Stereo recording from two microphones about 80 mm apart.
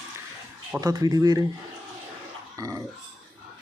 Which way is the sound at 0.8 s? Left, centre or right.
Right.